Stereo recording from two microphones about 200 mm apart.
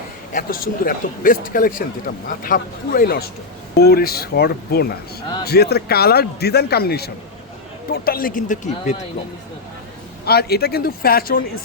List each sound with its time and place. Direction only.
0.3 s a man's voice: 45° left (ahead or behind)
10.2 s a man's voice: 50° left (ahead or behind)